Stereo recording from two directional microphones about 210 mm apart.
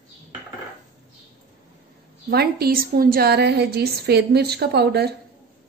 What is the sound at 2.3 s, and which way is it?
A woman's voice, 50° right (ahead or behind).